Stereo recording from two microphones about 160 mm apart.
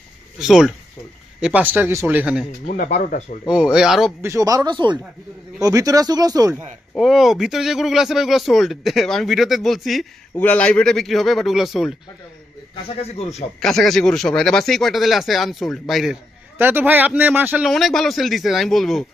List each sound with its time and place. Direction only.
0.3 s speech: 5° right (ahead or behind)
2.6 s a man's voice: 55° left (ahead or behind)
3.5 s speech: 5° right (ahead or behind)
4.2 s speech: 20° right (ahead or behind)
6.9 s speech: centre (ahead or behind)
12.7 s a man's voice: 40° left (ahead or behind)
13.6 s speech: 5° left (ahead or behind)
16.6 s speech: 15° right (ahead or behind)
17.7 s speech: centre (ahead or behind)